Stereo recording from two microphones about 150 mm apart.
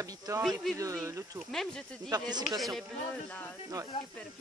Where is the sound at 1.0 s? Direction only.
20° right (ahead or behind).